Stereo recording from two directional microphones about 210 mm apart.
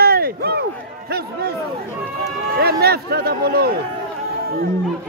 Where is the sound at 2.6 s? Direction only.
50° right (ahead or behind).